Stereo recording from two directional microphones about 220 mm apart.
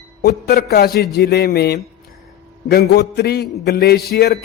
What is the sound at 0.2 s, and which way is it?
A man's voice, 45° left (ahead or behind).